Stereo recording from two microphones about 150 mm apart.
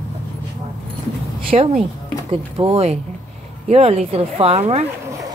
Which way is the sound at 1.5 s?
50° right (ahead or behind).